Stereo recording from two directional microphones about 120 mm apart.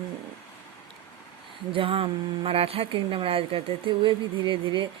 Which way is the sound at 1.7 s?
50° right (ahead or behind).